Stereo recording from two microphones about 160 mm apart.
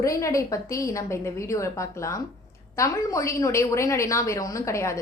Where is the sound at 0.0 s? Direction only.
20° left (ahead or behind).